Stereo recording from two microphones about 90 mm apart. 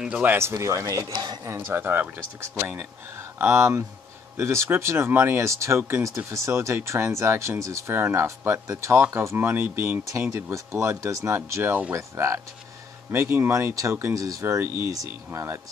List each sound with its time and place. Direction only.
0.0 s speech: 15° right (ahead or behind); by 1.5 s 50° right (ahead or behind)
1.5 s speech: 25° right (ahead or behind)
3.3 s speech: 25° right (ahead or behind)
14.5 s speech: 30° right (ahead or behind)